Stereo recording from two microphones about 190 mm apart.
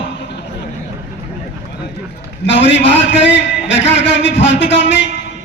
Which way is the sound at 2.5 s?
70° left (ahead or behind).